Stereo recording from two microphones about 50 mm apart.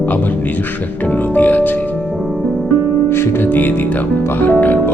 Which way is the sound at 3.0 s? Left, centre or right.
Left.